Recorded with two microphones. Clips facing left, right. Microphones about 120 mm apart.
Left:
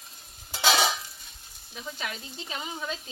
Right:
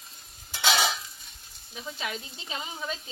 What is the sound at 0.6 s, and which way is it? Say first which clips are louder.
Stir: left 2 dB; 35° left (ahead or behind).